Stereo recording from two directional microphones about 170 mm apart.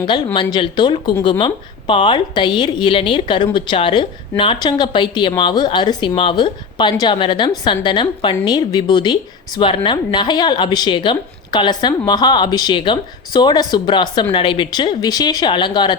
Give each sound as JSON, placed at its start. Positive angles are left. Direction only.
{"t": 0.3, "sound": "a woman's voice", "side_deg": 30}